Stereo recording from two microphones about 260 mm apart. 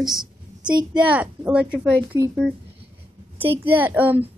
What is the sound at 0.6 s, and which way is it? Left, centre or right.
Speech, centre.